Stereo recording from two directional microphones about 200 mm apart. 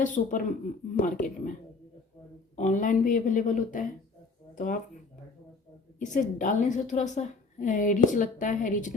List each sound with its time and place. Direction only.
0.0 s a woman's voice: 40° left (ahead or behind)
2.6 s a woman's voice: 40° left (ahead or behind)
6.0 s a woman's voice: 40° left (ahead or behind)